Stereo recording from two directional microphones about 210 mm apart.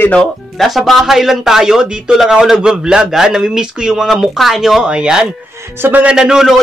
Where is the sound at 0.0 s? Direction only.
5° left (ahead or behind).